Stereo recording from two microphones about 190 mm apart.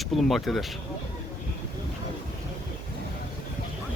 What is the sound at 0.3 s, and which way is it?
Speech, centre (ahead or behind).